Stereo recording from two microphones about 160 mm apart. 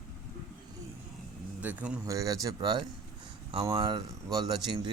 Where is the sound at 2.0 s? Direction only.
20° right (ahead or behind).